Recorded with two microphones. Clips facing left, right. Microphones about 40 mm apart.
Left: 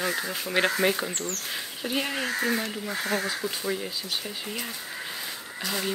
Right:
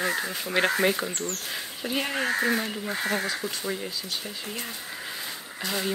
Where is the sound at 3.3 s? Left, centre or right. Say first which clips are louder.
Left 1 dB; centre.